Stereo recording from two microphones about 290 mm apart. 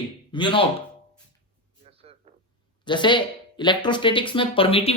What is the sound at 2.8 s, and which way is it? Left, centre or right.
A woman's voice, centre.